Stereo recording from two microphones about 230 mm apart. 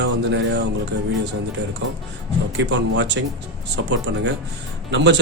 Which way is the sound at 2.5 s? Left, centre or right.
Right.